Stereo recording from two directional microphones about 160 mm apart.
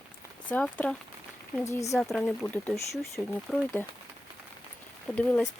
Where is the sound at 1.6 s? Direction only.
20° left (ahead or behind).